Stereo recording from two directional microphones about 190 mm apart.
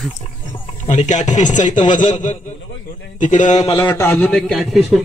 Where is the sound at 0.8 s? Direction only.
40° left (ahead or behind).